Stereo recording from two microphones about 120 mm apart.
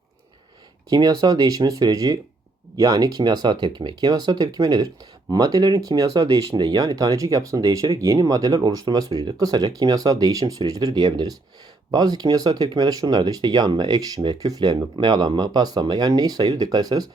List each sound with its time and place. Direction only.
0.9 s speech: 35° right (ahead or behind)